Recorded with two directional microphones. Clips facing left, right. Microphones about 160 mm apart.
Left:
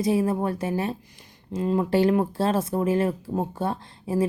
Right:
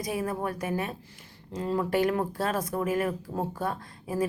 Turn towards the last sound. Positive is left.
turn(degrees=25)  # may be behind; listen again after turning